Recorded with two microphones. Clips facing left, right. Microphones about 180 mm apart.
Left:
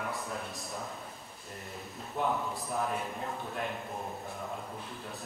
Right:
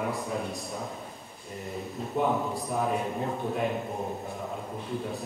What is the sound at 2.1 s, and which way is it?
Speech, centre (ahead or behind).